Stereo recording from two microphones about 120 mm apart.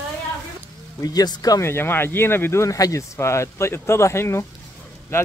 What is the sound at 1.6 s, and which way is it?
Speech, 20° left (ahead or behind).